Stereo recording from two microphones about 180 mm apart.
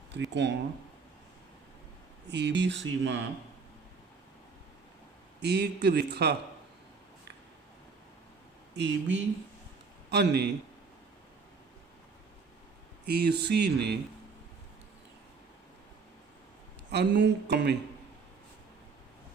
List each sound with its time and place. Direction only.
0.1 s speech: 75° right (ahead or behind)
2.2 s speech: 75° right (ahead or behind)
5.4 s a man's voice: 65° right (ahead or behind)
8.7 s speech: 85° right
10.1 s a man's voice: 65° right (ahead or behind)
13.1 s a man's voice: 65° right (ahead or behind)
16.9 s a man's voice: 70° right (ahead or behind)